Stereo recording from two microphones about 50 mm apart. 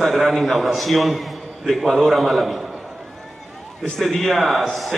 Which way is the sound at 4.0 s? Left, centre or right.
Centre.